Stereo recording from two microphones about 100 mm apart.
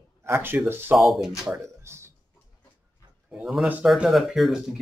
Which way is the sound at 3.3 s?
5° right (ahead or behind).